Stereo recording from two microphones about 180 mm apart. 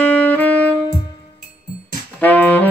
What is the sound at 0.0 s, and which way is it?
Saxophone, 10° left (ahead or behind).